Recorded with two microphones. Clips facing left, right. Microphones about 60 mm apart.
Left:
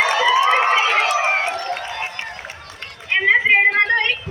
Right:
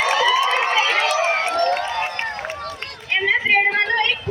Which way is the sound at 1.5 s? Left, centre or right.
Right.